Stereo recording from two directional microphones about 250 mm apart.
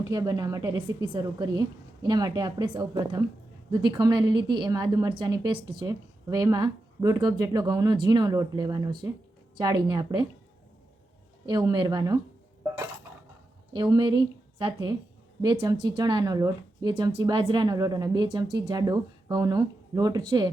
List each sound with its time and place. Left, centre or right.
0.0 s a woman's voice: centre
11.4 s a woman's voice: centre
13.7 s a woman's voice: centre